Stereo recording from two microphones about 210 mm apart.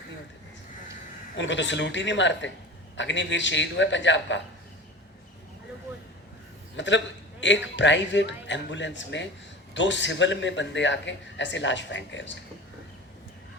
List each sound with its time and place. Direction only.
1.4 s speech: 60° left (ahead or behind)
6.7 s speech: 60° left (ahead or behind)